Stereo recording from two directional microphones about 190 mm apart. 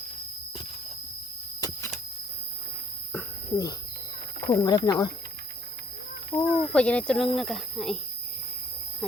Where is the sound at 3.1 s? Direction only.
20° left (ahead or behind).